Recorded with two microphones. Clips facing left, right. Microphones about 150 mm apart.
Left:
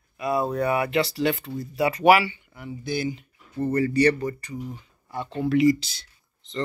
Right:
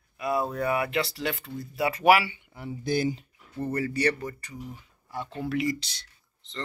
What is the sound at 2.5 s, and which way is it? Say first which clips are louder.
Speech: right 3 dB; 35° right (ahead or behind).